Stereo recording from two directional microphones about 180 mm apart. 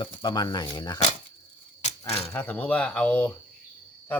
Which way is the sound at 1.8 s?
40° left (ahead or behind).